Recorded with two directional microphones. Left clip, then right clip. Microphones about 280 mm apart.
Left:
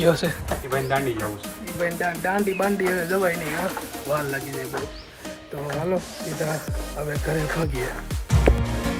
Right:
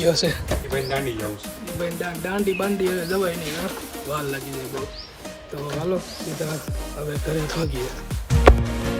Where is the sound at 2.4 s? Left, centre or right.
Centre.